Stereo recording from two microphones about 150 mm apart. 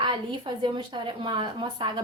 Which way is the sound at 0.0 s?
30° right (ahead or behind).